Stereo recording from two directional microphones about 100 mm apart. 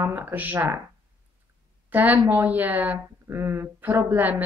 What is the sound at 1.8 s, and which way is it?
A woman's voice, 20° right (ahead or behind).